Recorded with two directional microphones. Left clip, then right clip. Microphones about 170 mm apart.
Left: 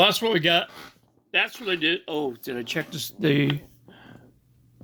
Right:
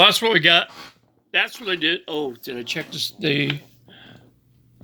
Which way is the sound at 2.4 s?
35° left (ahead or behind).